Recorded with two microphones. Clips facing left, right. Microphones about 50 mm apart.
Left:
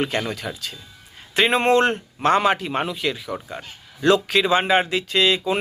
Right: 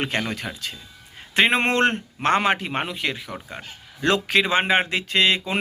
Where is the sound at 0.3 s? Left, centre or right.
Right.